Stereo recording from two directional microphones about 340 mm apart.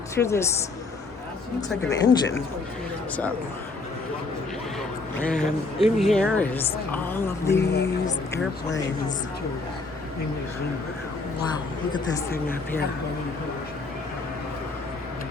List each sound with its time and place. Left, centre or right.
0.2 s speech: centre
1.9 s speech: centre
5.3 s a woman's voice: centre
7.6 s speech: left